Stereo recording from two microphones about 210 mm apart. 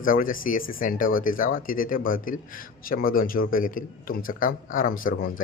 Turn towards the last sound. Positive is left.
turn(degrees=40)  # may be behind; listen again after turning